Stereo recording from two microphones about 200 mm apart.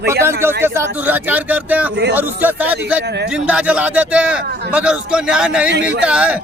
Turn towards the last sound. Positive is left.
turn(degrees=-5)  # may be behind; listen again after turning